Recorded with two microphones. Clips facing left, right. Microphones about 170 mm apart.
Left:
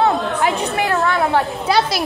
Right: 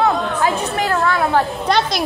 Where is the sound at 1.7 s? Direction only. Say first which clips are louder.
Left 1 dB; 5° left (ahead or behind).